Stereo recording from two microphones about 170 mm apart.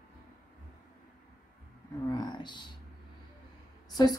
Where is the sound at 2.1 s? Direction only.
25° left (ahead or behind).